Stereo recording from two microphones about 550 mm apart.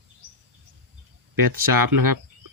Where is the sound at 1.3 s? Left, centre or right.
Right.